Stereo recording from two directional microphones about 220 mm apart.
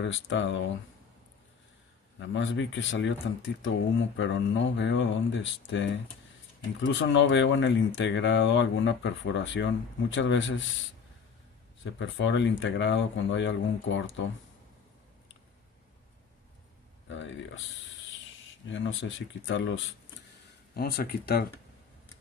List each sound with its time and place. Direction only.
0.0 s speech: 55° left (ahead or behind)
2.1 s speech: 60° left (ahead or behind)
11.8 s speech: 55° left (ahead or behind)
18.5 s speech: 60° left (ahead or behind)
20.7 s speech: 45° left (ahead or behind)